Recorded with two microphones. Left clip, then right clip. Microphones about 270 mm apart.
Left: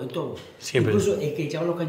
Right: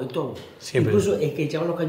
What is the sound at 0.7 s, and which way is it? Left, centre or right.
Speech, centre.